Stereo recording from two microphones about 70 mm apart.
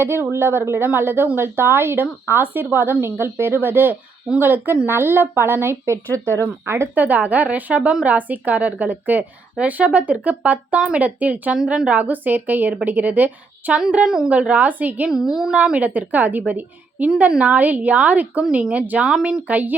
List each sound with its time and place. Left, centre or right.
0.0 s a woman's voice: right
6.9 s a woman's voice: right
13.9 s a woman's voice: centre
15.1 s a woman's voice: centre
15.5 s a woman's voice: centre